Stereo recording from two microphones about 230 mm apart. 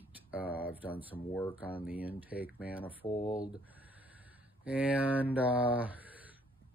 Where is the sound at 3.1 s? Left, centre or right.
Centre.